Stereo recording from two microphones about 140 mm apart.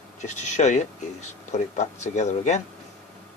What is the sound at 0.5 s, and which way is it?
A man's voice, 55° left (ahead or behind).